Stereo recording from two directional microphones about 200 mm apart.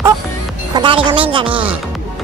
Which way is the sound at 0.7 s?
25° right (ahead or behind).